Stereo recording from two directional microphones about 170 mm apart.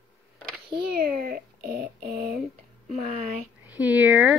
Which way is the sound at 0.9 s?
60° right (ahead or behind).